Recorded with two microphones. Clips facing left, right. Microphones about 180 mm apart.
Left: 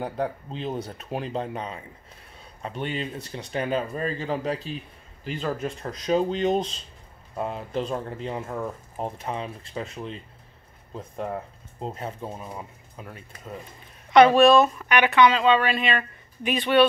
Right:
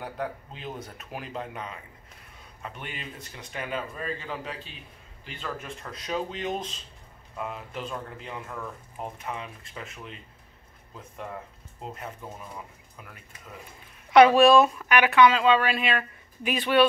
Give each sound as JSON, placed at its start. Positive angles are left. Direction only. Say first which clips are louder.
{"t": 0.0, "sound": "speech", "louder": "left 5 dB", "side_deg": 30}
{"t": 14.1, "sound": "speech", "louder": "left 1 dB", "side_deg": -5}